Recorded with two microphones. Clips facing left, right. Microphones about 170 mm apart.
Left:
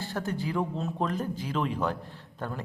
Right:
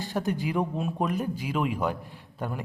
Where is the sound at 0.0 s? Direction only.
15° right (ahead or behind).